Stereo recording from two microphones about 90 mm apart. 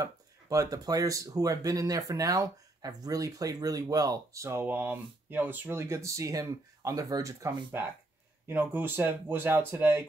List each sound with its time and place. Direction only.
0.0 s speech: 40° right (ahead or behind)
7.7 s speech: 25° right (ahead or behind)